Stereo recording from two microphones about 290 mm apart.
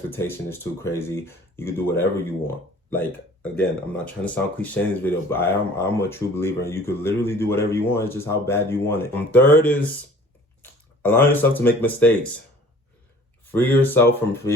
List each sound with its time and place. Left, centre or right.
0.1 s speech: centre
13.5 s speech: centre